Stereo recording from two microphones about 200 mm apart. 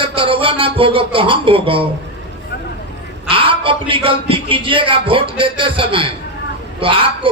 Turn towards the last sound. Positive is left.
turn(degrees=-25)  # may be behind; listen again after turning